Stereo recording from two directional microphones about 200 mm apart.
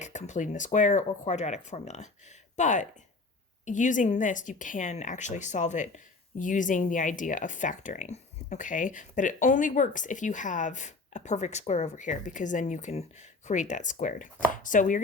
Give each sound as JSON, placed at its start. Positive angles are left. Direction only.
{"t": 0.0, "sound": "speech", "side_deg": 35}